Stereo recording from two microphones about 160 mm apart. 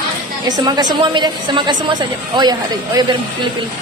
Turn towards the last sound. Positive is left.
turn(degrees=-25)  # may be behind; listen again after turning